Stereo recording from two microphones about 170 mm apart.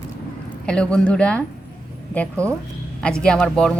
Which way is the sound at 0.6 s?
5° left (ahead or behind).